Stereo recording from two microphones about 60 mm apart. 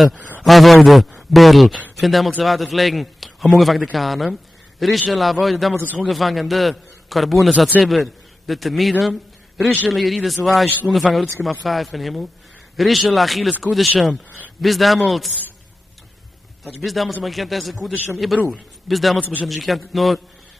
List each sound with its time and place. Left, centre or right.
0.4 s a man's voice: centre
16.6 s a man's voice: centre
19.1 s a man's voice: right
19.4 s a man's voice: centre